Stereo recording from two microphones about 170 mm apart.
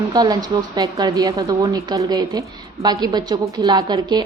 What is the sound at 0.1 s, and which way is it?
A woman's voice, 20° right (ahead or behind).